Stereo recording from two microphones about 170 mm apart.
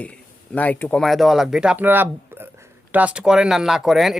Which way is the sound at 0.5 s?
10° left (ahead or behind).